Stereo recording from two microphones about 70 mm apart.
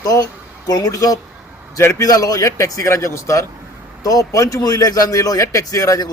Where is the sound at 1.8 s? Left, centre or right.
Left.